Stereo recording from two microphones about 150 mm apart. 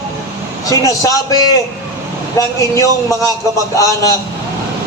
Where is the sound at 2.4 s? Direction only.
20° left (ahead or behind).